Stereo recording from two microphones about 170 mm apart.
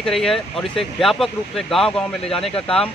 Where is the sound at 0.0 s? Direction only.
Centre (ahead or behind).